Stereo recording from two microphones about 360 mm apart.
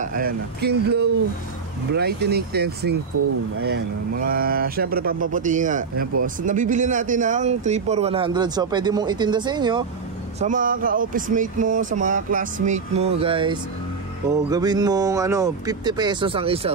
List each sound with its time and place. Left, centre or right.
0.0 s a man's voice: right